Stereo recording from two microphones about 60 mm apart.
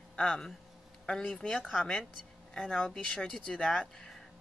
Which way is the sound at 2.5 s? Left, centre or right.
Centre.